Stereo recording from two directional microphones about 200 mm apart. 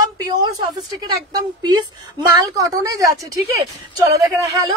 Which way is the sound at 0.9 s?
20° right (ahead or behind).